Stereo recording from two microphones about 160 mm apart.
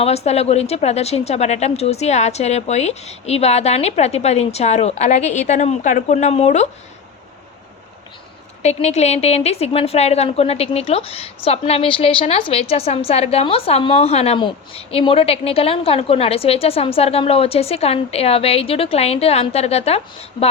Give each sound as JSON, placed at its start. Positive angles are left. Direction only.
{"t": 0.0, "sound": "a woman's voice", "side_deg": 40}
{"t": 8.6, "sound": "a woman's voice", "side_deg": 45}